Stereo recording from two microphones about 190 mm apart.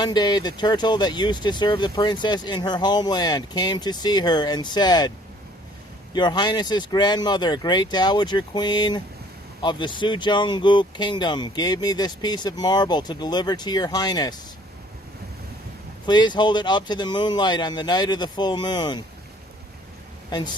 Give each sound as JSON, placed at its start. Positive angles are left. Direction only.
{"t": 0.0, "sound": "speech", "side_deg": 20}
{"t": 6.1, "sound": "speech", "side_deg": 20}
{"t": 16.0, "sound": "speech", "side_deg": 20}